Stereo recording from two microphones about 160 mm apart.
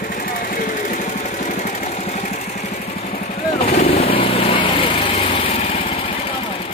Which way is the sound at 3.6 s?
40° left (ahead or behind).